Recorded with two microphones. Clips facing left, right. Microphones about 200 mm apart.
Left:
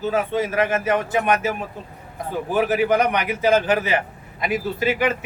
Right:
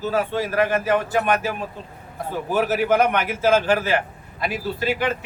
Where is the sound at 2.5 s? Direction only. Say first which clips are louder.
Left 1 dB; 15° left (ahead or behind).